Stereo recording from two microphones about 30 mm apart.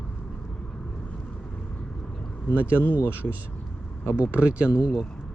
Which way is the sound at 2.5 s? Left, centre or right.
Left.